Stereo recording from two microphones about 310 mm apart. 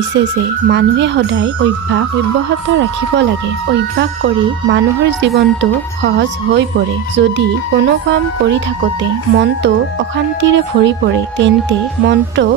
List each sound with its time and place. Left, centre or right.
0.7 s speech: right
3.7 s speech: right